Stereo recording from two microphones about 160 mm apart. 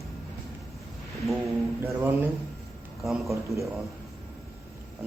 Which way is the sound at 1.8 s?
15° right (ahead or behind).